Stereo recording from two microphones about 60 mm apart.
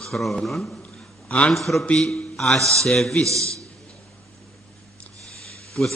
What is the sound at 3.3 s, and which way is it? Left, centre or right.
Speech, right.